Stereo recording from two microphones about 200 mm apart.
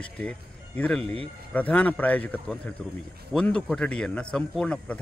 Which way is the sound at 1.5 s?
5° left (ahead or behind).